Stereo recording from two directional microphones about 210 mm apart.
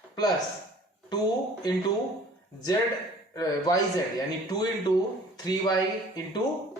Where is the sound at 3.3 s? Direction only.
20° left (ahead or behind).